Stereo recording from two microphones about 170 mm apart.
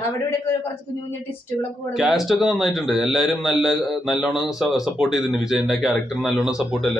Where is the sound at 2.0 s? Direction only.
Centre (ahead or behind).